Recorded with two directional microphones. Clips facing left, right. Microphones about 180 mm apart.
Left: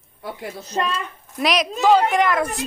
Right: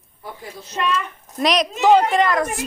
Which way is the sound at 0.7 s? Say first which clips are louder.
Right 1 dB; 35° left (ahead or behind).